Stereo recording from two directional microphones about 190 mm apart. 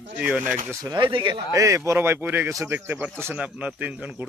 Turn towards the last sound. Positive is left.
turn(degrees=-5)  # may be behind; listen again after turning